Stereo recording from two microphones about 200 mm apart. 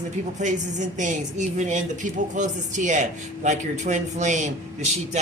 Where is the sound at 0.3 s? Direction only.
35° right (ahead or behind).